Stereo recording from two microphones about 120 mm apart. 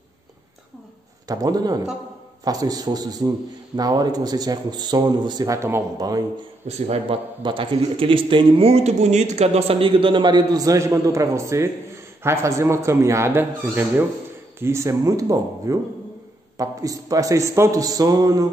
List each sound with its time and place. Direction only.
1.2 s a man's voice: 30° right (ahead or behind)
6.9 s a man's voice: 50° right (ahead or behind); by 18.5 s 30° right (ahead or behind)